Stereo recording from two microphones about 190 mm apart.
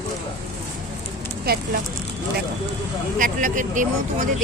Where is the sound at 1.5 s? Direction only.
50° right (ahead or behind).